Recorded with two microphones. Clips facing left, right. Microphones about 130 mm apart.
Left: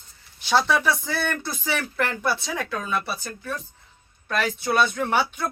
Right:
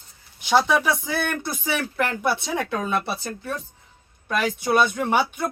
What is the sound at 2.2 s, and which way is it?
Speech, 20° right (ahead or behind).